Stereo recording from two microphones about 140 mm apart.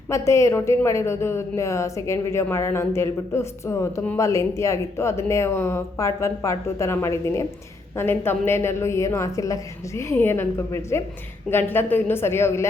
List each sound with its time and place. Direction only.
0.1 s a woman's voice: 20° left (ahead or behind)